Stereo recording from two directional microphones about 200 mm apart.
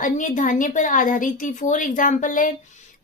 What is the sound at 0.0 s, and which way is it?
A woman's voice, 40° left (ahead or behind).